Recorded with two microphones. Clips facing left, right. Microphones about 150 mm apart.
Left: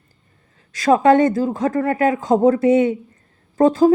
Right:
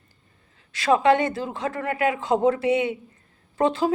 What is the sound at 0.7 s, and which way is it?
Speech, 40° left (ahead or behind).